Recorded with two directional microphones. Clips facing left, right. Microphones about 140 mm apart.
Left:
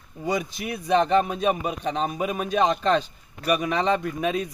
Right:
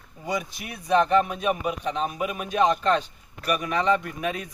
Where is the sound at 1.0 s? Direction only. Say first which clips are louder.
Left 1 dB; 30° left (ahead or behind).